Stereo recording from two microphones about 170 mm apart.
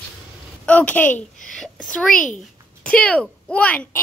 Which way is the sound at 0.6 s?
10° left (ahead or behind).